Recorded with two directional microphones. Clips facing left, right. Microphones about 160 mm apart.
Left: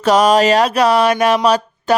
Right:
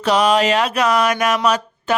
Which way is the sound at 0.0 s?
40° left (ahead or behind).